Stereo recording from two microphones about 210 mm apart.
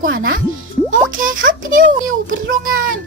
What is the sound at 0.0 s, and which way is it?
A woman's voice, 40° right (ahead or behind).